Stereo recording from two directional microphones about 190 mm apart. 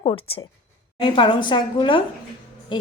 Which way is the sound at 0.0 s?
30° left (ahead or behind).